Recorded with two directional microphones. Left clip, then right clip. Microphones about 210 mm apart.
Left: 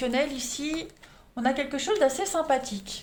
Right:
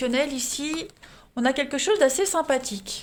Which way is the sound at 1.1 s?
55° right (ahead or behind).